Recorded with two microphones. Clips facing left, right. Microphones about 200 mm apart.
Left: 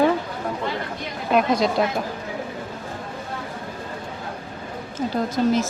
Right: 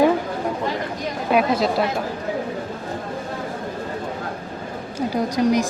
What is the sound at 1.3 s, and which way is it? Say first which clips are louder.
Speech: even; 5° right (ahead or behind).